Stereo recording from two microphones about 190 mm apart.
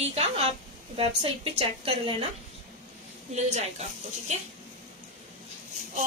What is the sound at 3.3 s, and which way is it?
Speech, 35° right (ahead or behind).